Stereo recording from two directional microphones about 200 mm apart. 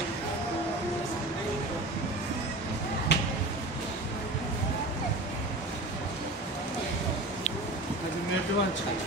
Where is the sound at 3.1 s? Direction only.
60° left (ahead or behind).